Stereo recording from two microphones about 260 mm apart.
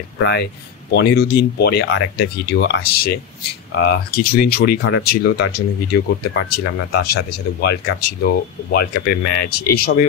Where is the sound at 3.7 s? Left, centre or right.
Left.